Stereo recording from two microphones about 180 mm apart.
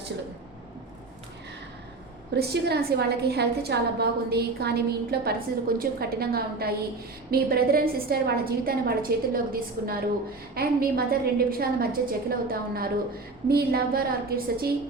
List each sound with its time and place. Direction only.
2.3 s a woman's voice: 65° right (ahead or behind)